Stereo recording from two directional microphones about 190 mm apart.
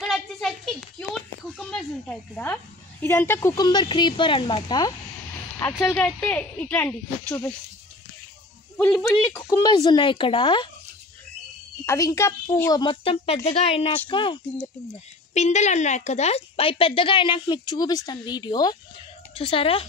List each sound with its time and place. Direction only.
0.0 s a sound: centre (ahead or behind)
1.5 s a woman's voice: 5° left (ahead or behind)
8.7 s a woman's voice: 10° left (ahead or behind); by 10.7 s 25° left (ahead or behind)
11.8 s a woman's voice: 15° left (ahead or behind)
15.3 s a woman's voice: 35° left (ahead or behind)